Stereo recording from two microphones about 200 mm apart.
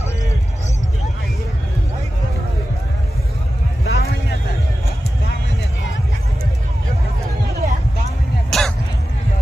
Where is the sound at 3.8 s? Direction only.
50° left (ahead or behind).